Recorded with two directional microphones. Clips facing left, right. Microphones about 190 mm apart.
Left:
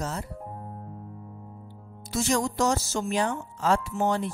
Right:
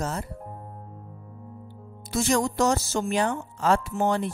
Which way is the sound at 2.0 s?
60° right (ahead or behind).